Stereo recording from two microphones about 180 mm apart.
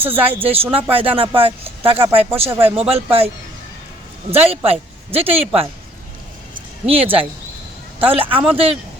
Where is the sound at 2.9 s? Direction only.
35° right (ahead or behind).